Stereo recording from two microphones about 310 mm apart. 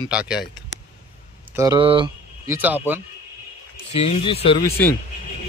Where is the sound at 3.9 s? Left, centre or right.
Centre.